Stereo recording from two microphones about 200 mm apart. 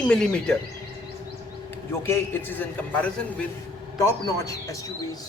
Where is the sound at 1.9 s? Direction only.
10° left (ahead or behind).